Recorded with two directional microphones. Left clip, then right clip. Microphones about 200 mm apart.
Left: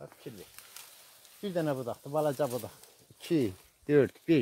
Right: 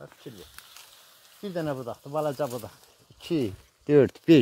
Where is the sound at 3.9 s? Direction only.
35° right (ahead or behind).